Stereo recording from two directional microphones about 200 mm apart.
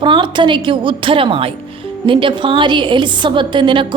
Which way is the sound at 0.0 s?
25° right (ahead or behind).